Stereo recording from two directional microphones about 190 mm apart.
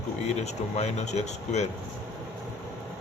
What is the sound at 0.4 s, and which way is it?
Speech, 35° left (ahead or behind).